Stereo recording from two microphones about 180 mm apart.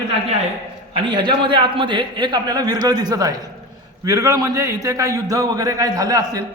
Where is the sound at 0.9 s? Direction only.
25° right (ahead or behind).